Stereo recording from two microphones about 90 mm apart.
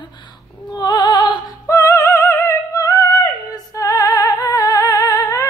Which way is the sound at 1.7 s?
35° left (ahead or behind).